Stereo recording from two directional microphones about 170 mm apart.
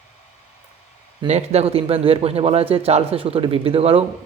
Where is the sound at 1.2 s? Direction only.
40° right (ahead or behind).